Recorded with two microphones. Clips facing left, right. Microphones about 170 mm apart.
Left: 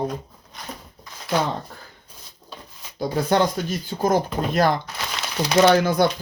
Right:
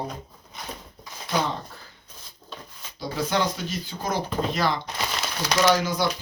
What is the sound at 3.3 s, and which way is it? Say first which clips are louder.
Speech: left 6 dB; 50° left (ahead or behind).